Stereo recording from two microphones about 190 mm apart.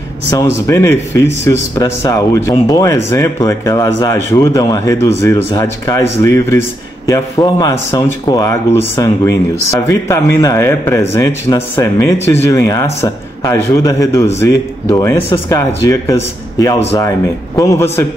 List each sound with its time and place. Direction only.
0.3 s speech: 15° left (ahead or behind)
17.6 s speech: 15° left (ahead or behind)